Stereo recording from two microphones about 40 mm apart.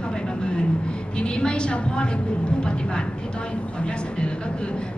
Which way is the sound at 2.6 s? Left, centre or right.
Left.